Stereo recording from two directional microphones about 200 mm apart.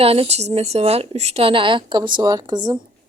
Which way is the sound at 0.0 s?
30° right (ahead or behind).